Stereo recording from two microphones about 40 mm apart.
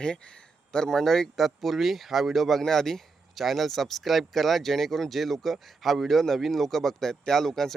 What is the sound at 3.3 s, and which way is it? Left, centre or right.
Speech, centre.